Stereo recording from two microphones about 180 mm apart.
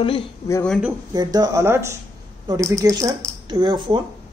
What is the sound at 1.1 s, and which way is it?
A man's voice, 20° right (ahead or behind).